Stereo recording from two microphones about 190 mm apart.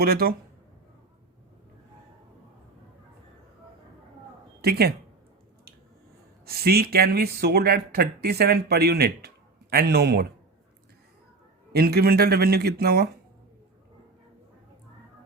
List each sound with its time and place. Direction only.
0.0 s speech: 55° right (ahead or behind)
4.6 s speech: 55° right (ahead or behind)
6.4 s speech: 55° right (ahead or behind)
11.7 s speech: 55° right (ahead or behind)